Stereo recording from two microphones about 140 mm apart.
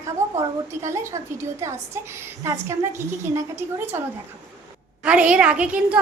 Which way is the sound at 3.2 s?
20° right (ahead or behind).